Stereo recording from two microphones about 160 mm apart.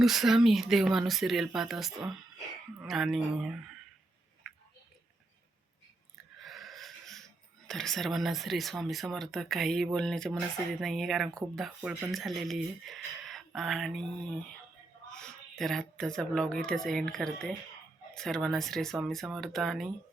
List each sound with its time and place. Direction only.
0.0 s speech: centre (ahead or behind)
6.4 s wheeze: centre (ahead or behind)
7.7 s speech: centre (ahead or behind)
15.1 s speech: 5° left (ahead or behind)